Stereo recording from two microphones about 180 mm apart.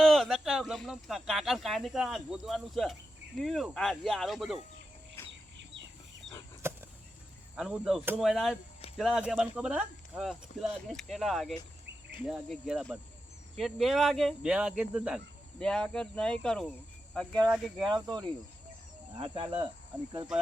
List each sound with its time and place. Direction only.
0.0 s speech: centre (ahead or behind)
5.3 s a sound: 85° right
6.6 s chop: 15° right (ahead or behind)
7.5 s speech: 5° right (ahead or behind)
17.8 s cricket: 20° right (ahead or behind)